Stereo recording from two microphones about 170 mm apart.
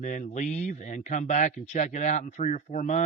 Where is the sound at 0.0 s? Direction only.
45° left (ahead or behind).